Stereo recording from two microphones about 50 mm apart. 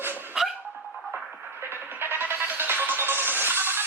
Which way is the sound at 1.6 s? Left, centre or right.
Right.